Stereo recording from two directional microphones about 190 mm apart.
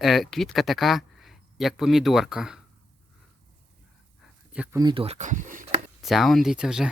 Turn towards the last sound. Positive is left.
turn(degrees=-5)  # may be behind; listen again after turning